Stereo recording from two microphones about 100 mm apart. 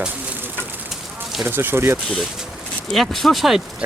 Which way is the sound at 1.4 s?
20° right (ahead or behind).